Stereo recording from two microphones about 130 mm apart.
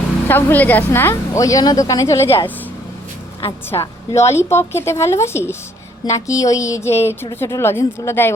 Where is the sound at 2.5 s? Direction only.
15° left (ahead or behind).